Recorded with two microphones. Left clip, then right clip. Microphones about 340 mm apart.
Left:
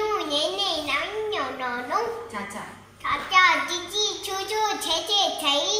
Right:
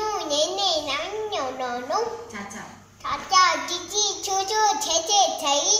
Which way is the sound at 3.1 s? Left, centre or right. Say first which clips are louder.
Left 1 dB; centre.